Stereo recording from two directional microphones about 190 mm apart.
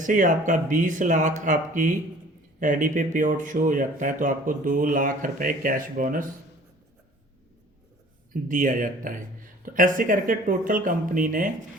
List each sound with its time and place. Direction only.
0.0 s speech: 40° right (ahead or behind)
8.3 s speech: 45° right (ahead or behind)